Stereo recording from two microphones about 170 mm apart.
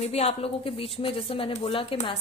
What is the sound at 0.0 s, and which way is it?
A woman's voice, 40° left (ahead or behind).